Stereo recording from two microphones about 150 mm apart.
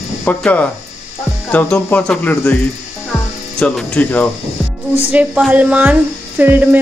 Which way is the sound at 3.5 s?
5° left (ahead or behind).